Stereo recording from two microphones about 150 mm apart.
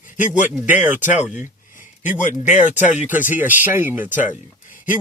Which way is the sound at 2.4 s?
55° left (ahead or behind).